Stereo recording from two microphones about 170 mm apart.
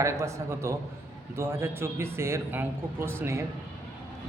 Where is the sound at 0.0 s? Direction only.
15° right (ahead or behind).